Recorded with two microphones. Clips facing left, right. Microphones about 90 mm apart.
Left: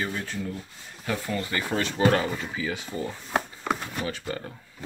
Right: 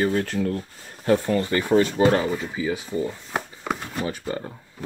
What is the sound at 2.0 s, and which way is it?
Speech, 20° right (ahead or behind).